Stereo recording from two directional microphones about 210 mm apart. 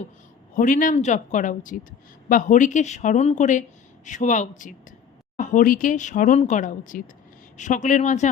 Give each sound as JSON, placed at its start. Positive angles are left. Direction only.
{"t": 0.5, "sound": "speech", "side_deg": 40}